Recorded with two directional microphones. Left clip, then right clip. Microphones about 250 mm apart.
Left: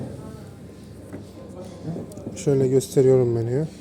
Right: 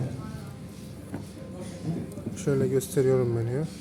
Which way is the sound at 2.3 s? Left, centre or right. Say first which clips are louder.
Left 6 dB; centre.